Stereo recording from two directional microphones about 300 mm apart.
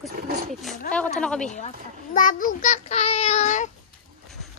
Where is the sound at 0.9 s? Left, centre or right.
Centre.